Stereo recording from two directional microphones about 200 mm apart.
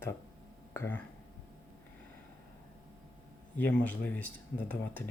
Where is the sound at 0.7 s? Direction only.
10° left (ahead or behind).